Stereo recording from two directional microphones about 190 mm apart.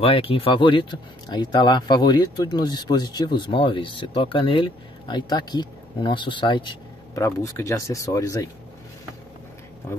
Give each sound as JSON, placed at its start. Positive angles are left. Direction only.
{"t": 0.0, "sound": "speech", "side_deg": 30}